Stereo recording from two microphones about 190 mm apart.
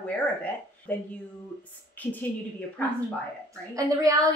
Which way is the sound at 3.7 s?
15° right (ahead or behind).